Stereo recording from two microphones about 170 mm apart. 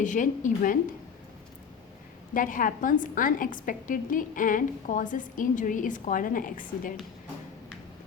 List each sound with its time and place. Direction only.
0.0 s a woman's voice: 50° left (ahead or behind)
2.3 s a woman's voice: 50° left (ahead or behind)